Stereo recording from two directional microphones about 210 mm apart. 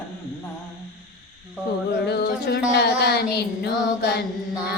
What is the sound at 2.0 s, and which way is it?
Child singing, 50° left (ahead or behind).